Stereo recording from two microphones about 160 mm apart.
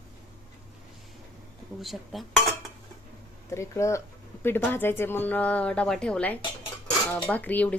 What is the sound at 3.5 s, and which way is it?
Speech, 20° left (ahead or behind).